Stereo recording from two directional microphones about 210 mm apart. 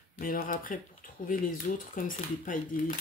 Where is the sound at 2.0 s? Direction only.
40° left (ahead or behind).